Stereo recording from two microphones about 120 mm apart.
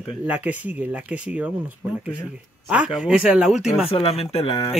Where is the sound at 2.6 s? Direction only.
10° right (ahead or behind).